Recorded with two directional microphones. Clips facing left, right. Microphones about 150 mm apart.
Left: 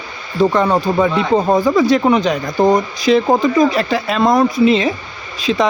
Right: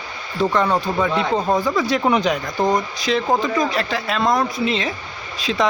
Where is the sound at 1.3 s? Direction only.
20° left (ahead or behind).